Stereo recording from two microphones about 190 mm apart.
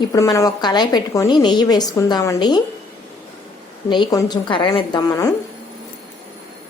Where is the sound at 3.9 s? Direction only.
20° left (ahead or behind).